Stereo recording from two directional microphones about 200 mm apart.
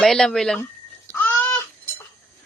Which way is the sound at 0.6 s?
10° left (ahead or behind).